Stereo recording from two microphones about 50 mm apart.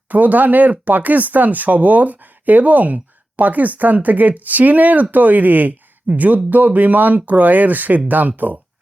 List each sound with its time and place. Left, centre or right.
0.1 s speech: right